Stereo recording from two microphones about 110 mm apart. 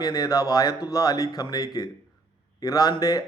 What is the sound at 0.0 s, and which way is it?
Speech, 35° left (ahead or behind).